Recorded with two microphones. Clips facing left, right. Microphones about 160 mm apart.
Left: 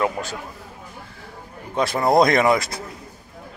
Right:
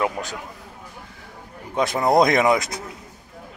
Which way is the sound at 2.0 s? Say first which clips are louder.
Left 1 dB; 15° right (ahead or behind).